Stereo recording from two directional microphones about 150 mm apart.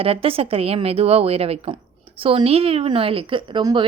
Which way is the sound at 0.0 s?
40° right (ahead or behind).